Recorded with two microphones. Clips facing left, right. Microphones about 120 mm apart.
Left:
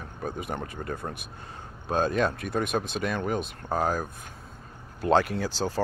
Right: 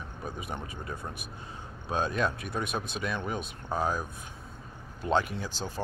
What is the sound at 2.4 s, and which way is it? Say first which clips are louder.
Speech: left 6 dB; 90° left.